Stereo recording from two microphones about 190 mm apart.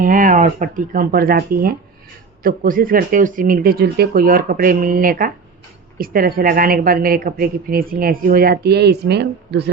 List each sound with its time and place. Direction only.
0.0 s speech: 45° right (ahead or behind); by 9.6 s 65° right (ahead or behind)